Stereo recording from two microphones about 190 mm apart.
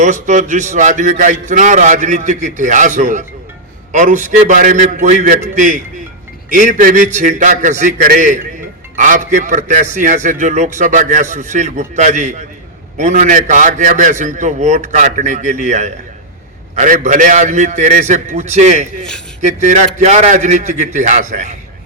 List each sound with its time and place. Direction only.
0.0 s a man's voice: 40° right (ahead or behind)